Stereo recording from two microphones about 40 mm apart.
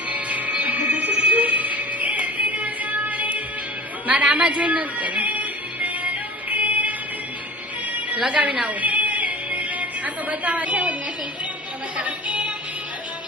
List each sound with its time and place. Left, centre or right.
0.1 s music: right
4.0 s a woman's voice: right
6.5 s music: right
8.4 s a woman's voice: right
8.8 s music: right
10.2 s a woman's voice: right
11.9 s a woman's voice: right